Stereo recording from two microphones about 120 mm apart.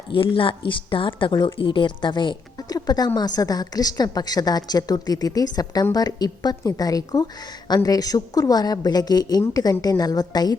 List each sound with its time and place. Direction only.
0.1 s a woman's voice: 50° left (ahead or behind)